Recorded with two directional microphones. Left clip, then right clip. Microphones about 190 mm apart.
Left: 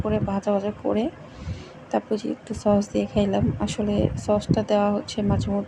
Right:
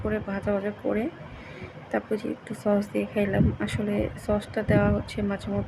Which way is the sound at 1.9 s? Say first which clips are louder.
Left 3 dB; 10° left (ahead or behind).